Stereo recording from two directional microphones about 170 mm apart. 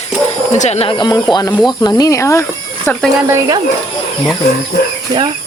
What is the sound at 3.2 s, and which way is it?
Speech, 20° right (ahead or behind).